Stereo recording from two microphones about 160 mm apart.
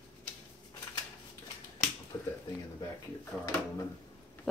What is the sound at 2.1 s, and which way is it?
Finger snapping, 20° left (ahead or behind).